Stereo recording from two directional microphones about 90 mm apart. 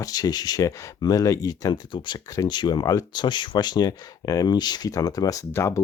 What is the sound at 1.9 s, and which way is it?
Speech, 60° left (ahead or behind).